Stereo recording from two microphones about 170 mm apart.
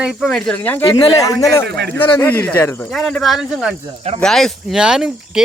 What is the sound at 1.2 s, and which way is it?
Speech, 20° left (ahead or behind).